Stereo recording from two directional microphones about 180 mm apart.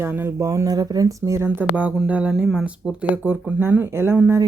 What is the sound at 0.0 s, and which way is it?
Speech, 15° right (ahead or behind).